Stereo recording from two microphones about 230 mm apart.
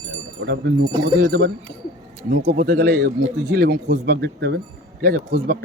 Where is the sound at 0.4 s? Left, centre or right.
Right.